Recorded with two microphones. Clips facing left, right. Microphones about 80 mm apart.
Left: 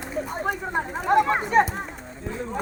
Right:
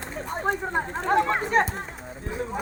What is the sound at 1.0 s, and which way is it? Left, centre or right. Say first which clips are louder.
Speech: left 3 dB; centre.